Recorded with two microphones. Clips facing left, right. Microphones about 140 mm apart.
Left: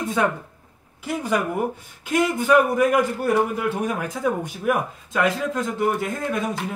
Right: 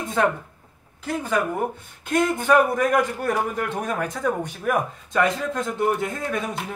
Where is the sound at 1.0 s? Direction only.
15° left (ahead or behind).